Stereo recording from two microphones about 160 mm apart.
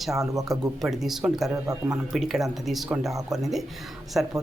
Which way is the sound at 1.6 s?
20° right (ahead or behind).